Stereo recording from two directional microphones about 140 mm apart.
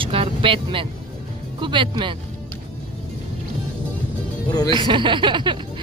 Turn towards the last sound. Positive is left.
turn(degrees=-35)  # may be behind; listen again after turning